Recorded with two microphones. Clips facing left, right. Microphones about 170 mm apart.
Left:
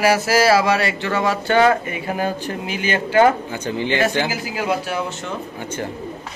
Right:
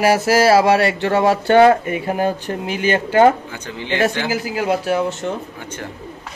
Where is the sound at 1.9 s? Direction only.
45° right (ahead or behind).